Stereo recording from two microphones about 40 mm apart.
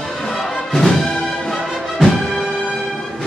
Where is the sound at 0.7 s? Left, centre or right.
Centre.